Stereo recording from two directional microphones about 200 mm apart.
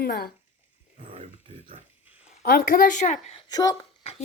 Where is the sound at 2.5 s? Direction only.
45° left (ahead or behind).